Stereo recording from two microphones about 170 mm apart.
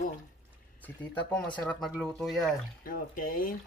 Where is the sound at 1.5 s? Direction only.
5° left (ahead or behind).